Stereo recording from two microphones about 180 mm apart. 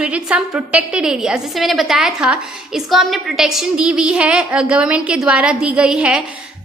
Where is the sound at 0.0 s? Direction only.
5° right (ahead or behind).